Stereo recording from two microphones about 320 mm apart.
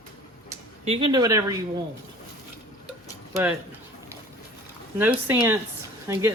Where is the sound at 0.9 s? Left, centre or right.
Centre.